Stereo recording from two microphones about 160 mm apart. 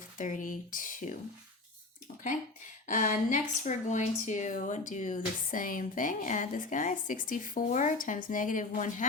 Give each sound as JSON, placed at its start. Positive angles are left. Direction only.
{"t": 0.2, "sound": "speech", "side_deg": 55}
{"t": 2.8, "sound": "speech", "side_deg": 50}